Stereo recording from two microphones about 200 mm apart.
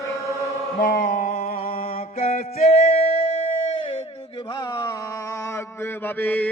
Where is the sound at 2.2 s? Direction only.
35° left (ahead or behind).